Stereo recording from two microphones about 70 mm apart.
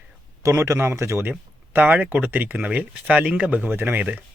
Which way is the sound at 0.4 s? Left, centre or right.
Right.